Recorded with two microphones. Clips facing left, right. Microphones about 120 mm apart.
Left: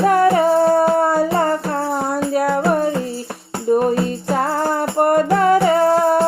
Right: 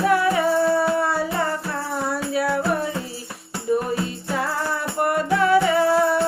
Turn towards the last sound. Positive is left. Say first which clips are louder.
# left 4 dB
turn(degrees=45)  # may be behind; listen again after turning